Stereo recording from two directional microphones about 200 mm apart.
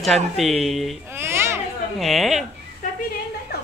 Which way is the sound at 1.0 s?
10° right (ahead or behind).